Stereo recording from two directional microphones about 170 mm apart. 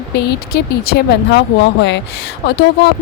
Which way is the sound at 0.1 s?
80° left.